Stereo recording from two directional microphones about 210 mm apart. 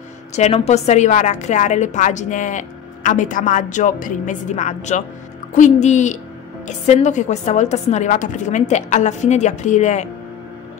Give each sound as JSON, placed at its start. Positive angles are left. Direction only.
{"t": 0.4, "sound": "a woman's voice", "side_deg": 30}